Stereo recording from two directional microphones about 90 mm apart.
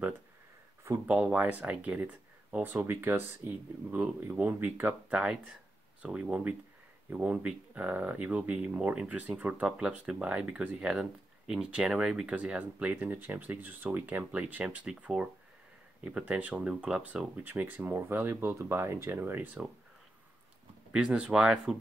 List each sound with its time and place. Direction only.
1.0 s speech: 15° right (ahead or behind)
5.2 s speech: 10° right (ahead or behind)
20.9 s speech: 10° right (ahead or behind)